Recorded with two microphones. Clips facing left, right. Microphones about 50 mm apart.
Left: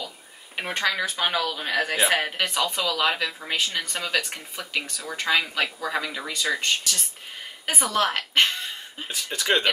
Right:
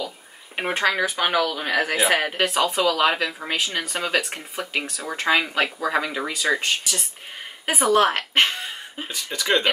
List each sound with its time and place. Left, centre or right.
0.6 s speech: centre
9.1 s speech: centre